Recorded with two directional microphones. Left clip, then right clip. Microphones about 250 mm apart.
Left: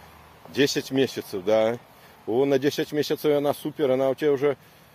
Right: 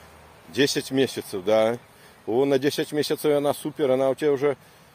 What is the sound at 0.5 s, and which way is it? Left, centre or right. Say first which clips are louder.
Speech: even; centre.